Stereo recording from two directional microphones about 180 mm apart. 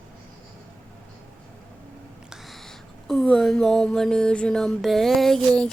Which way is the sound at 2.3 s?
Centre (ahead or behind).